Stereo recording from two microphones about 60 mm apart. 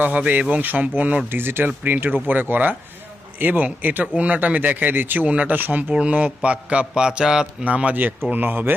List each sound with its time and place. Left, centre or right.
0.0 s speech: right
1.3 s speech: right
5.9 s speech: centre
7.6 s speech: right